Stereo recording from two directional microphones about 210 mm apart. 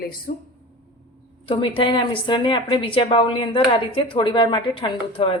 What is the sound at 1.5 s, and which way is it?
A woman's voice, 25° left (ahead or behind).